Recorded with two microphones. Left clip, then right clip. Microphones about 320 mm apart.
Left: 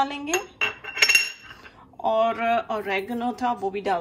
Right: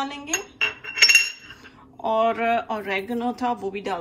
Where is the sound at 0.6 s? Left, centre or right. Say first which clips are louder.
Right 4 dB; left.